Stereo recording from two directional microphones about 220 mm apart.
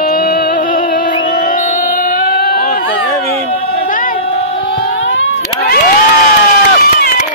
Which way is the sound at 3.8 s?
40° left (ahead or behind).